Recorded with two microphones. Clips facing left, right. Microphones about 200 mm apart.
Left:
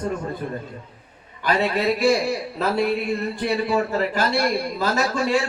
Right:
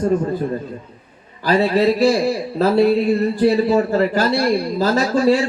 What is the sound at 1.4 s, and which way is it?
A man's voice, 35° right (ahead or behind).